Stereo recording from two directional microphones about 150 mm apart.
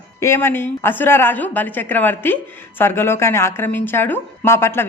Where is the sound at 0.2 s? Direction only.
15° left (ahead or behind).